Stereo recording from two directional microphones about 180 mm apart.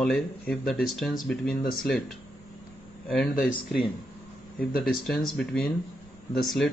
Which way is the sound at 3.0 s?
5° left (ahead or behind).